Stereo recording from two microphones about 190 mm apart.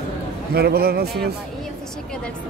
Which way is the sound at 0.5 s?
55° right (ahead or behind).